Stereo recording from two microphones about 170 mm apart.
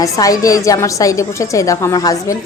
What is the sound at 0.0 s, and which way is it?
A woman's voice, 20° left (ahead or behind).